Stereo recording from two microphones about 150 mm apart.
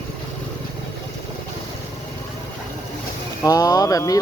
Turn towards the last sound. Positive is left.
turn(degrees=20)  # may be behind; listen again after turning